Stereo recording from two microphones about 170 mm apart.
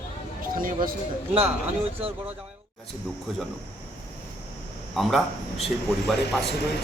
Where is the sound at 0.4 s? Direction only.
55° right (ahead or behind).